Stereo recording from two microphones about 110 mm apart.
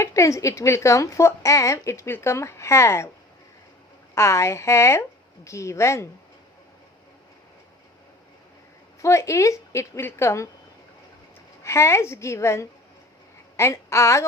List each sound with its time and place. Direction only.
0.0 s speech: 30° left (ahead or behind)
4.1 s speech: 25° left (ahead or behind)
9.0 s speech: 25° left (ahead or behind)
11.6 s speech: 25° left (ahead or behind)